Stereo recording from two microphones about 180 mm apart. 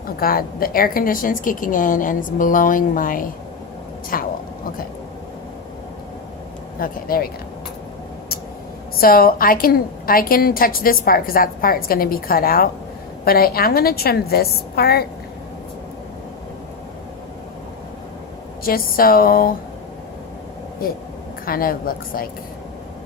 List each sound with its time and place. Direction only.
0.2 s a woman's voice: 55° left (ahead or behind)
6.7 s a woman's voice: 55° left (ahead or behind)
9.0 s a woman's voice: 55° left (ahead or behind)
18.6 s a woman's voice: 55° left (ahead or behind)
20.8 s a woman's voice: 55° left (ahead or behind)